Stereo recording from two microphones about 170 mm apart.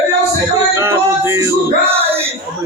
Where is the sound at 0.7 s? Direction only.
15° right (ahead or behind).